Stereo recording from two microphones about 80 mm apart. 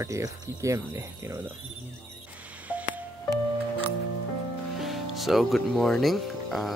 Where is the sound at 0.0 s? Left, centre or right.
Right.